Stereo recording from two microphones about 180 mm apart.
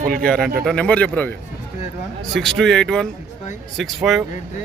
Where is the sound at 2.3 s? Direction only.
Centre (ahead or behind).